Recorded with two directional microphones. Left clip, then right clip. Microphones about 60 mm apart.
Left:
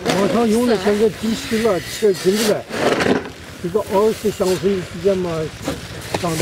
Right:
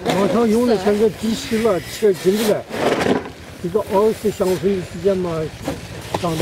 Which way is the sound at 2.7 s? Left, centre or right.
Left.